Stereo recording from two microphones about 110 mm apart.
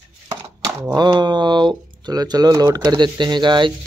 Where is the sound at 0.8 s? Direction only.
40° right (ahead or behind).